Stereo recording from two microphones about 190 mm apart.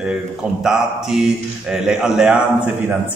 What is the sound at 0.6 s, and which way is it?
A man's voice, 5° right (ahead or behind).